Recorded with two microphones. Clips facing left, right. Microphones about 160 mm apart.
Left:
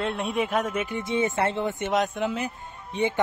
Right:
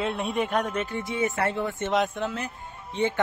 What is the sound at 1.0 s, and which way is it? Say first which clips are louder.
Speech: left 3 dB; 25° left (ahead or behind).